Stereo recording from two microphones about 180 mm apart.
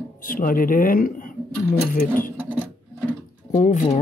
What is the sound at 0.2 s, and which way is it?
Speech, 50° left (ahead or behind).